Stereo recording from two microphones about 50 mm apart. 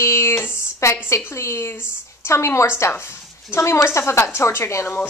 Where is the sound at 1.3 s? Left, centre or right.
Left.